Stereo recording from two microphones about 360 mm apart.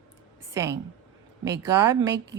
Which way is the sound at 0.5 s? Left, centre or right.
Centre.